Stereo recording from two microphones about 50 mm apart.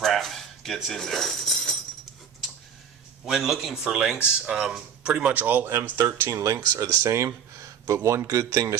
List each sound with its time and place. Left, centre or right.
0.0 s speech: centre
3.3 s speech: centre
3.8 s speech: centre
5.2 s speech: right
6.2 s speech: right